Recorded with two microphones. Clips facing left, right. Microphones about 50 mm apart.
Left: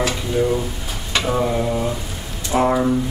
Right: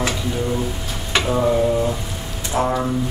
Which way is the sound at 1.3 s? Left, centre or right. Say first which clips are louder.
Right 2 dB; centre.